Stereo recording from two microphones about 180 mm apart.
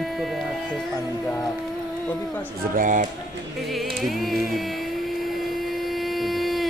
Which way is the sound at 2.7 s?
45° right (ahead or behind).